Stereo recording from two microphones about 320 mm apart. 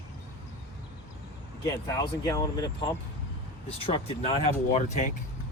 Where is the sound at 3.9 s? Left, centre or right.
Centre.